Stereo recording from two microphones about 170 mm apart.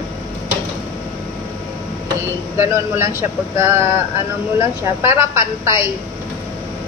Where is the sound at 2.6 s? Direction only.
15° right (ahead or behind).